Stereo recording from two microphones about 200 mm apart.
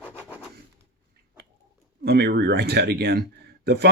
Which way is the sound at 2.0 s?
55° right (ahead or behind).